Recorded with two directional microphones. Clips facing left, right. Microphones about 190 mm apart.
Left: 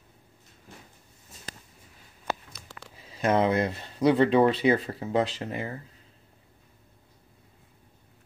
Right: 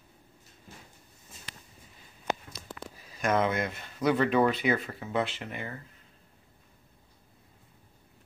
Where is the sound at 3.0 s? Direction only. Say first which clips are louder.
Left 4 dB; 30° left (ahead or behind).